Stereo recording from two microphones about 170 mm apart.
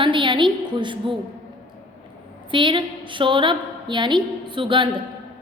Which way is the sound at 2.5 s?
30° right (ahead or behind).